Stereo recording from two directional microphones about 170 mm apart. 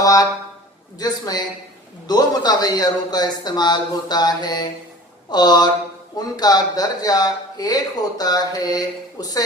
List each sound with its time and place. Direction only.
0.0 s speech: 20° left (ahead or behind)